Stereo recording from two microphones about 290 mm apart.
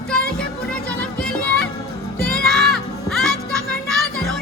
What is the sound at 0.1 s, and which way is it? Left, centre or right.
Music, centre.